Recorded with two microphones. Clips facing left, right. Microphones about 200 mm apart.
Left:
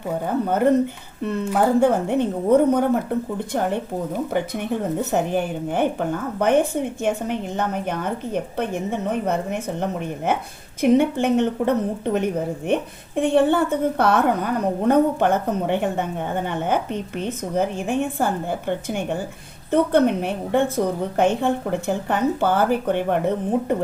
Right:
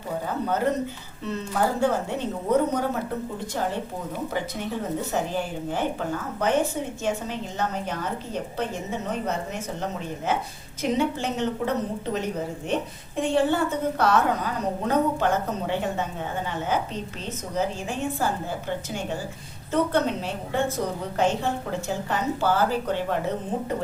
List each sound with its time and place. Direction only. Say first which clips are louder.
0.4 s a woman's voice: left 7 dB; 55° left (ahead or behind)